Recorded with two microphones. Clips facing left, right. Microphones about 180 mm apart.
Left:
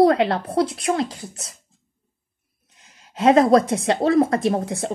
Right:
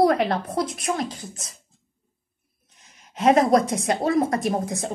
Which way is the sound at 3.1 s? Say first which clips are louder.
Left 3 dB; 30° left (ahead or behind).